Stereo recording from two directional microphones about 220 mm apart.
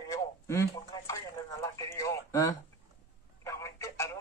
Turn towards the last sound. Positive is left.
turn(degrees=10)  # may be behind; listen again after turning